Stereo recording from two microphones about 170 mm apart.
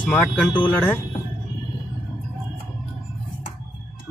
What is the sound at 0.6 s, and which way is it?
Speech, 10° left (ahead or behind).